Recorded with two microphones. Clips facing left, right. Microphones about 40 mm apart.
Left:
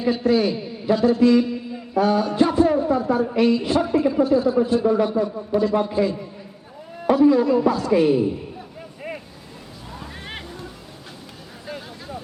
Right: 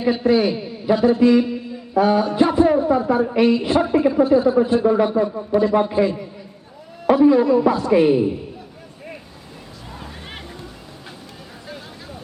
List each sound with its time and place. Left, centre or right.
0.0 s a man's voice: right